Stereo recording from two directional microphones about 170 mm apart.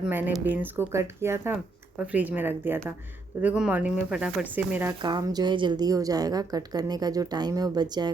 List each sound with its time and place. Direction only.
0.0 s speech: 10° right (ahead or behind)
5.0 s a woman's voice: 25° right (ahead or behind)